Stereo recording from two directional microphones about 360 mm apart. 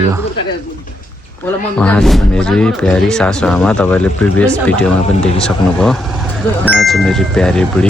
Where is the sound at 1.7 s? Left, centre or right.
Centre.